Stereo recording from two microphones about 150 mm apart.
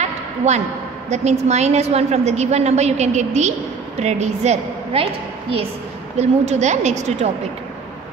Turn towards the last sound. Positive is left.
turn(degrees=-50)  # may be behind; listen again after turning